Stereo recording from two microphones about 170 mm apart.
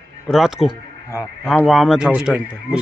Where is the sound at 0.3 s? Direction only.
Centre (ahead or behind).